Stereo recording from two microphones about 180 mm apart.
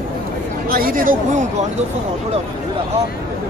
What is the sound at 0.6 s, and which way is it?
Speech, 55° right (ahead or behind).